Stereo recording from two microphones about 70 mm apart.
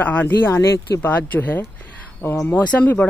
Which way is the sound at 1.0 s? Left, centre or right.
Left.